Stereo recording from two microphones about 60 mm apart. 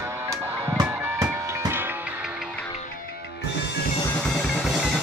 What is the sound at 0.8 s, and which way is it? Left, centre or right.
Music, right.